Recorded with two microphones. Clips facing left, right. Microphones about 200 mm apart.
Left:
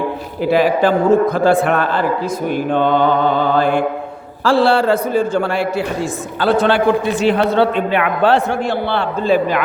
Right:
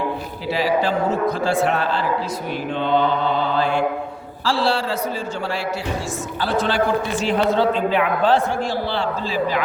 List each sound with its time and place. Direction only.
0.4 s a man's voice: 55° left (ahead or behind)
2.6 s mantra: 55° left (ahead or behind)
4.4 s a man's voice: 55° left (ahead or behind)